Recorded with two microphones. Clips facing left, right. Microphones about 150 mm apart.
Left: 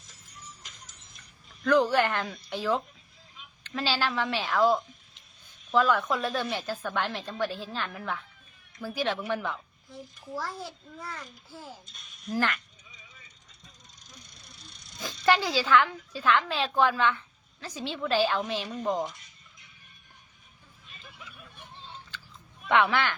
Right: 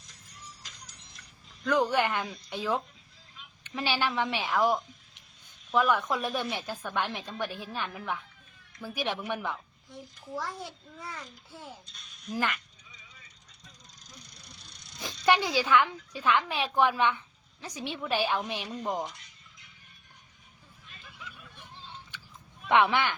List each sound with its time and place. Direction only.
1.6 s a woman's voice: 15° right (ahead or behind)
9.5 s a child's voice: centre (ahead or behind)
14.6 s a sound: centre (ahead or behind)
15.3 s a woman's voice: 20° right (ahead or behind)
22.7 s speech: 20° right (ahead or behind)